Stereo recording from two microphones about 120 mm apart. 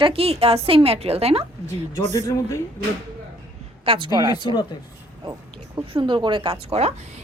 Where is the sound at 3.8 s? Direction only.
50° right (ahead or behind).